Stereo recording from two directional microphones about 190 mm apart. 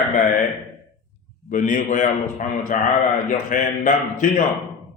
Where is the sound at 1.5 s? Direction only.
45° left (ahead or behind).